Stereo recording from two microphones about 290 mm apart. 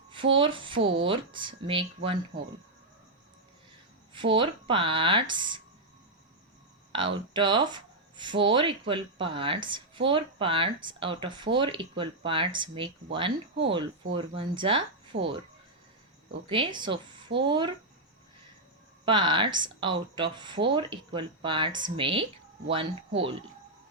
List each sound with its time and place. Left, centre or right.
0.1 s speech: centre
4.1 s speech: centre
6.9 s speech: centre
15.1 s speech: right
16.5 s speech: centre
19.0 s speech: centre